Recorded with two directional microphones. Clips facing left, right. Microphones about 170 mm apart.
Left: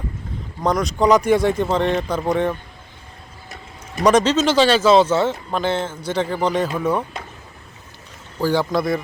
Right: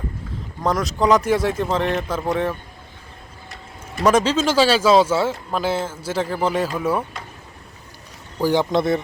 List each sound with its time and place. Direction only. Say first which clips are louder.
0.6 s speech: left 2 dB; centre (ahead or behind)
4.0 s speech: left 2 dB; 5° right (ahead or behind)
8.4 s a man's voice: right 1 dB; 15° right (ahead or behind)